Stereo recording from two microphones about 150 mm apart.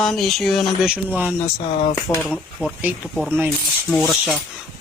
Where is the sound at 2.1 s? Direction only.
10° left (ahead or behind).